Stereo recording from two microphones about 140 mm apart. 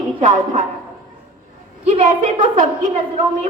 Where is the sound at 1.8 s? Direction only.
50° right (ahead or behind).